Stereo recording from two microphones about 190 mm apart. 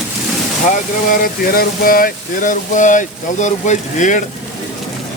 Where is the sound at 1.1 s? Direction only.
50° left (ahead or behind).